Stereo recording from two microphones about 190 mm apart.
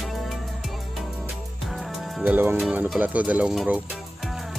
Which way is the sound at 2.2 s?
10° right (ahead or behind).